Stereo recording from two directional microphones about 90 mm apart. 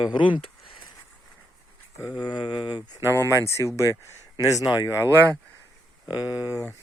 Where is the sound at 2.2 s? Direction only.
60° left (ahead or behind).